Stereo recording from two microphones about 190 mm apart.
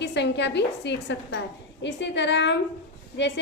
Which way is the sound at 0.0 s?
65° left (ahead or behind).